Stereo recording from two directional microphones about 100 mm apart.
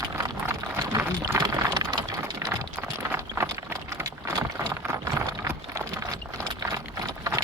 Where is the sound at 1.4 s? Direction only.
40° right (ahead or behind).